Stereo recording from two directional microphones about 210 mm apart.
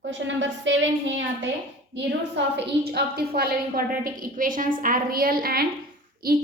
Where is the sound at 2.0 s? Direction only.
55° right (ahead or behind).